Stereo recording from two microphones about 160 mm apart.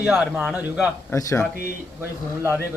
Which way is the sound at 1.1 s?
20° left (ahead or behind).